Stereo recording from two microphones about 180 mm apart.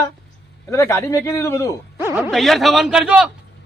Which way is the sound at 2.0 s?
15° right (ahead or behind).